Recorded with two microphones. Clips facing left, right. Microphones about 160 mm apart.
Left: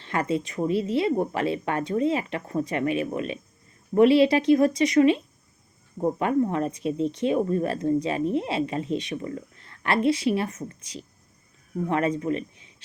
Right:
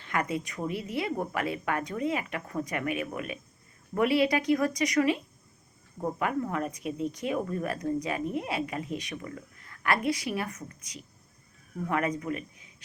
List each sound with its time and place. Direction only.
0.0 s speech: 25° left (ahead or behind)